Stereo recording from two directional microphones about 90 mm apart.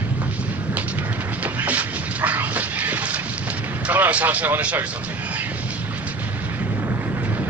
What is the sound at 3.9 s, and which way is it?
Speech, 15° right (ahead or behind).